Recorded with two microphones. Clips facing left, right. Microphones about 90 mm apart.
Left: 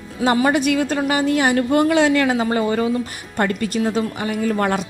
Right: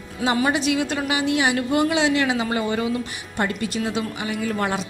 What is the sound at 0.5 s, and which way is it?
A woman's voice, 50° left (ahead or behind).